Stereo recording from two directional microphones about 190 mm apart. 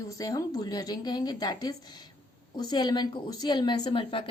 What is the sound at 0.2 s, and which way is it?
Speech, 20° left (ahead or behind).